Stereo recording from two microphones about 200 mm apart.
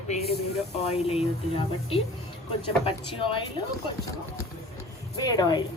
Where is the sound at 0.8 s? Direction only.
30° left (ahead or behind).